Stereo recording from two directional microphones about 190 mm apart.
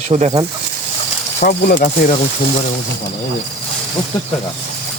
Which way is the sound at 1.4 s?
50° left (ahead or behind).